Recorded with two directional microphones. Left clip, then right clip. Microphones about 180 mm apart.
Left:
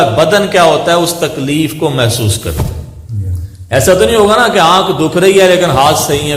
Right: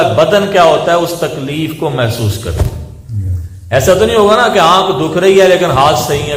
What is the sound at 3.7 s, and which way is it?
A man's voice, 30° left (ahead or behind).